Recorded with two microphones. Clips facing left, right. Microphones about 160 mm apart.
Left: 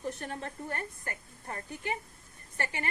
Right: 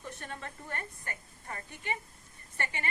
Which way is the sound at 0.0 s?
40° left (ahead or behind).